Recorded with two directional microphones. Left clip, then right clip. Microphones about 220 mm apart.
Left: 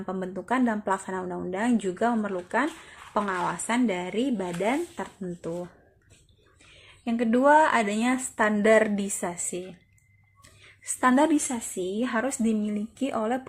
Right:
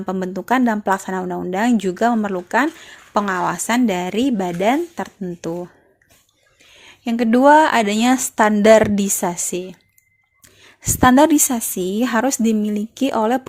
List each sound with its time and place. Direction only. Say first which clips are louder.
0.0 s a woman's voice: right 8 dB; 40° right (ahead or behind)
6.8 s a woman's voice: right 7 dB; 40° right (ahead or behind)
11.0 s speech: right 9 dB; 40° right (ahead or behind)